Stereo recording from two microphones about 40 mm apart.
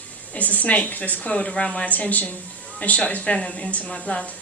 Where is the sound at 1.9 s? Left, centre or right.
Left.